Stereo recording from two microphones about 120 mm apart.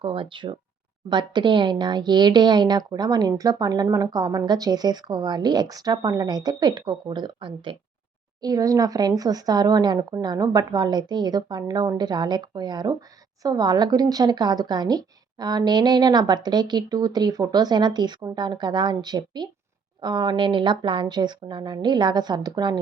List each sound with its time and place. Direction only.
0.0 s speech: 45° right (ahead or behind)
8.4 s speech: 30° right (ahead or behind)